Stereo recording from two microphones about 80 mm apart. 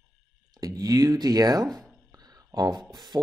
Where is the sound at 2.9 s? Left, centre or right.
Right.